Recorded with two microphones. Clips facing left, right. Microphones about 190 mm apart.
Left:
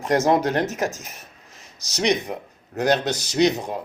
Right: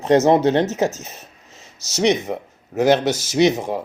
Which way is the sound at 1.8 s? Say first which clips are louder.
Right 4 dB; 15° left (ahead or behind).